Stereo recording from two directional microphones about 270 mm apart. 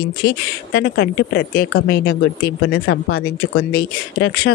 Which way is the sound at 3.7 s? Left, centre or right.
Left.